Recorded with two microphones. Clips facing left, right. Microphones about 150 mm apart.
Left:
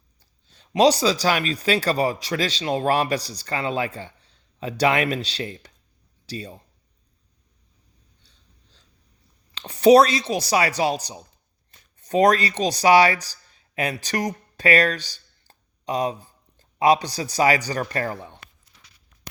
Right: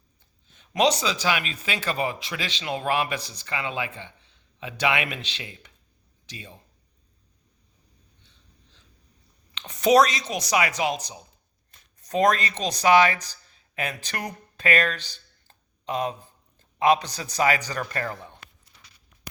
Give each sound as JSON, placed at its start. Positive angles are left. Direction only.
{"t": 0.2, "sound": "speech", "side_deg": 35}
{"t": 9.6, "sound": "speech", "side_deg": 30}
{"t": 15.4, "sound": "a sound", "side_deg": 35}
{"t": 16.8, "sound": "speech", "side_deg": 35}